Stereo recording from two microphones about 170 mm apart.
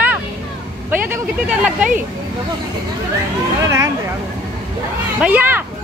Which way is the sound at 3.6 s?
15° right (ahead or behind).